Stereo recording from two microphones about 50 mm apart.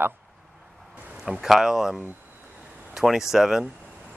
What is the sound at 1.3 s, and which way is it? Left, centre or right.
Speech, centre.